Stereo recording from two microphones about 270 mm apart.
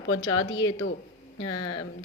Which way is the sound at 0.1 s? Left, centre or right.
Left.